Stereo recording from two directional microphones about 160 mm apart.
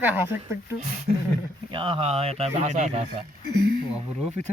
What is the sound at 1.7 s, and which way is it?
Speech, 35° right (ahead or behind).